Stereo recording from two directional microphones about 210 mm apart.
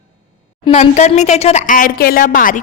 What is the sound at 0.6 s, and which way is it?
Speech, 30° left (ahead or behind).